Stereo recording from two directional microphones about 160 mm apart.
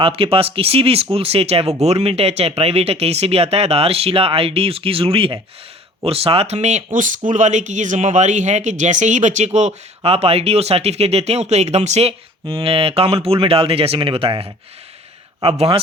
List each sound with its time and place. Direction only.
0.0 s speech: 35° right (ahead or behind)